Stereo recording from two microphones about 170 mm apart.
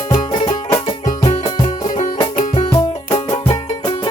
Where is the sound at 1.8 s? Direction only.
50° left (ahead or behind).